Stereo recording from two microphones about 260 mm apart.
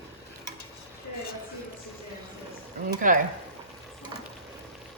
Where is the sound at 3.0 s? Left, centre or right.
Right.